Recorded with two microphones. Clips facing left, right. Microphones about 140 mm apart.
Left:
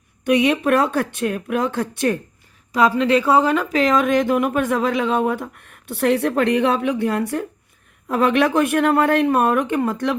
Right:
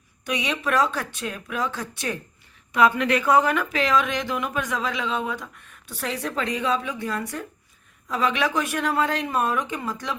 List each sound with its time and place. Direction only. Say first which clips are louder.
0.3 s speech: left 10 dB; 55° left (ahead or behind)
2.7 s a woman's voice: left 4 dB; 35° left (ahead or behind); by 10.2 s 55° left (ahead or behind)